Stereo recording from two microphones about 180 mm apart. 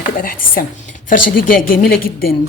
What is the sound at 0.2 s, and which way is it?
A woman's voice, 50° left (ahead or behind).